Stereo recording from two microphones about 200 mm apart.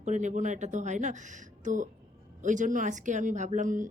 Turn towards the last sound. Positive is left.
turn(degrees=-40)  # may be behind; listen again after turning